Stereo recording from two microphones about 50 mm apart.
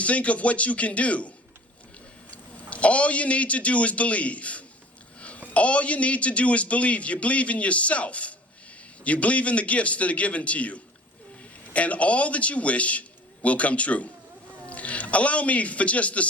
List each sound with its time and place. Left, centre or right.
0.0 s a man's voice: left
2.3 s a man's voice: left